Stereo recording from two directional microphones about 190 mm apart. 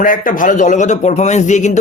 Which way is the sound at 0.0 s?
45° left (ahead or behind).